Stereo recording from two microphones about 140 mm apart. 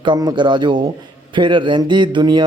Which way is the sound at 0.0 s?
30° right (ahead or behind).